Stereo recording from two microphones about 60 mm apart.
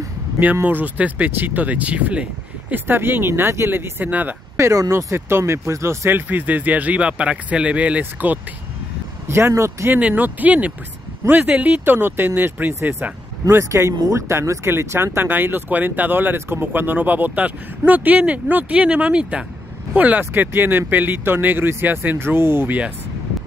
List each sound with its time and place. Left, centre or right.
0.6 s speech: right
2.7 s speech: right
4.0 s speech: right
4.6 s speech: right
6.2 s speech: right
9.3 s speech: right
9.9 s speech: right
12.5 s speech: right
13.5 s speech: right